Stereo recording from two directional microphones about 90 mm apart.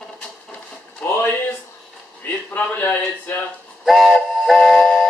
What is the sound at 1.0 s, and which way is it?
Speech, 10° left (ahead or behind).